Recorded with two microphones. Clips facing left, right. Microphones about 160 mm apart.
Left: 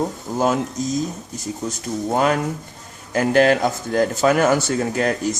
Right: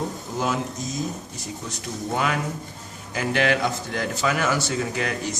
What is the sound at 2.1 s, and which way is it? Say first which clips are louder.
A man's voice: left 6 dB; 40° left (ahead or behind).